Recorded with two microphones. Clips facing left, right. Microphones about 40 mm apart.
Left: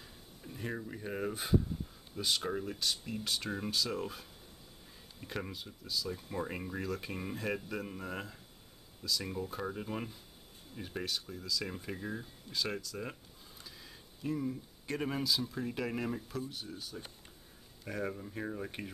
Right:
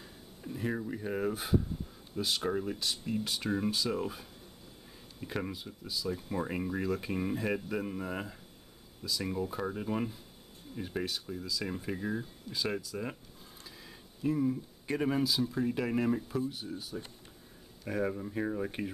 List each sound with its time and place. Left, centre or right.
0.0 s speech: centre
14.2 s speech: centre